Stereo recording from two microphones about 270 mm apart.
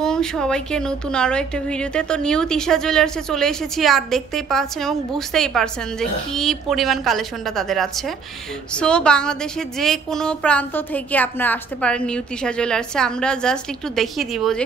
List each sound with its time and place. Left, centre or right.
0.0 s a woman's voice: centre